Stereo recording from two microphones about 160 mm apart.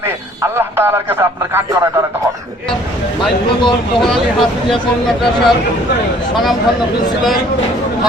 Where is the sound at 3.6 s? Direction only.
30° left (ahead or behind).